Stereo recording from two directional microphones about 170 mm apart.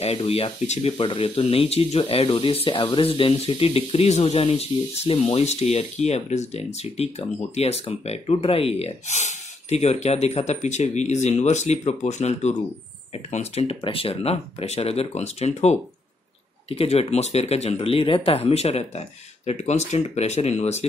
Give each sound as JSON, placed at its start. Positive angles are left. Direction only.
{"t": 0.0, "sound": "speech", "side_deg": 35}